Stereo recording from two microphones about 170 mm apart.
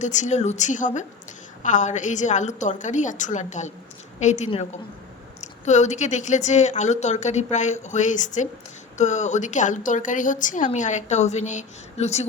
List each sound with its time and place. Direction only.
0.0 s a woman's voice: 45° left (ahead or behind)